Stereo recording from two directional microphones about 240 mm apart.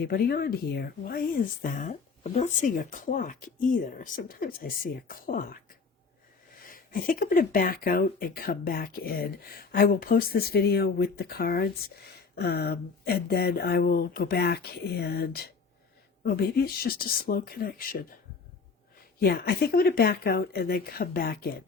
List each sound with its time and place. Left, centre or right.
0.0 s speech: left
6.6 s speech: left
19.2 s speech: left